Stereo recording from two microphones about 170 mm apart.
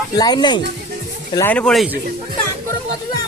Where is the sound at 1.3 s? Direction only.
10° left (ahead or behind).